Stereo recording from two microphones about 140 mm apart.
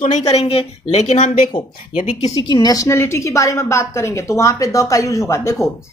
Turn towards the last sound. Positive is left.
turn(degrees=20)  # may be behind; listen again after turning